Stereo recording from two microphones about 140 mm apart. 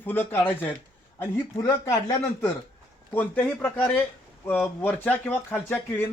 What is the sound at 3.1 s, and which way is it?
Speech, 15° left (ahead or behind).